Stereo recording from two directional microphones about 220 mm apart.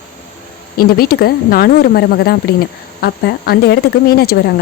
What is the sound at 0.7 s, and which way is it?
Speech, 45° left (ahead or behind).